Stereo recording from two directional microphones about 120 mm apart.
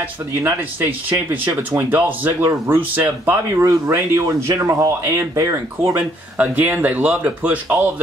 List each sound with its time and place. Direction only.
0.4 s speech: 20° right (ahead or behind)
6.3 s speech: 15° right (ahead or behind)